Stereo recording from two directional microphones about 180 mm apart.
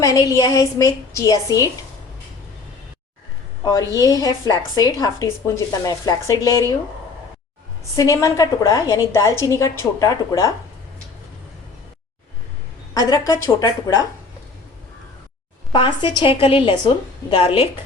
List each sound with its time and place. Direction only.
0.0 s a woman's voice: 20° left (ahead or behind)
3.6 s a woman's voice: 20° left (ahead or behind)
7.9 s a woman's voice: 15° left (ahead or behind)
12.9 s a woman's voice: 20° left (ahead or behind)
15.7 s a woman's voice: 25° left (ahead or behind)